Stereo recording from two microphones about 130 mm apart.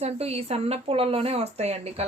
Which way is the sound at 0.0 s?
50° right (ahead or behind).